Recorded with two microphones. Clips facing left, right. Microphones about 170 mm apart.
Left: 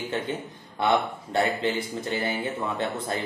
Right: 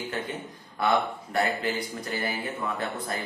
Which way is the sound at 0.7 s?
25° left (ahead or behind).